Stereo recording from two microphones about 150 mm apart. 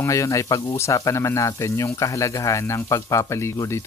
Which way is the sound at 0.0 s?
20° left (ahead or behind).